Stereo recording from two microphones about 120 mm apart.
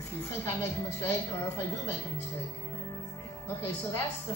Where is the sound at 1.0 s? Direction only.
20° left (ahead or behind).